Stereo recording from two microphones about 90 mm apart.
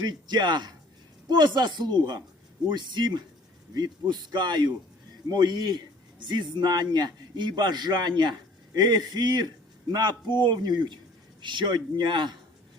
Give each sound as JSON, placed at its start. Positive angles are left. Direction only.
{"t": 0.0, "sound": "a man's voice", "side_deg": -55}